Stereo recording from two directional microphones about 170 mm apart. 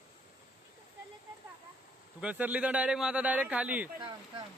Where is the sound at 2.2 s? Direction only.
10° right (ahead or behind).